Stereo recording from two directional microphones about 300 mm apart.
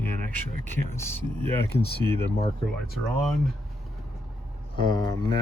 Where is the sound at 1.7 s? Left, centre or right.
Left.